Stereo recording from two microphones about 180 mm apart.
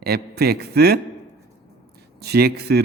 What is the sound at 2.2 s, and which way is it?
Speech, 65° right (ahead or behind).